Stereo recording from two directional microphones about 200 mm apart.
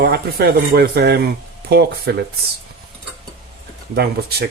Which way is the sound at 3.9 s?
50° right (ahead or behind).